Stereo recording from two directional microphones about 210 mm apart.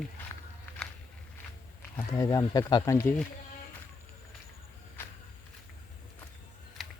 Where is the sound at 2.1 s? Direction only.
15° left (ahead or behind).